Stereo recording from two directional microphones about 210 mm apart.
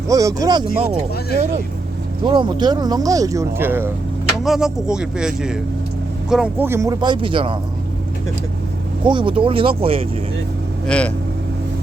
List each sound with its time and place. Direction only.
0.1 s speech: 15° right (ahead or behind)
2.2 s speech: 20° right (ahead or behind)
9.0 s speech: 25° right (ahead or behind)
10.8 s speech: 5° left (ahead or behind)